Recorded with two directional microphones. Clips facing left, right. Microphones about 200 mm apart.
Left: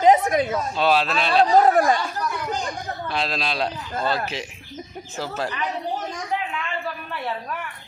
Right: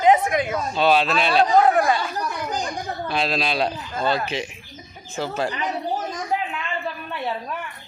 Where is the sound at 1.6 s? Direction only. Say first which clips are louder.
Left 1 dB; 40° left (ahead or behind).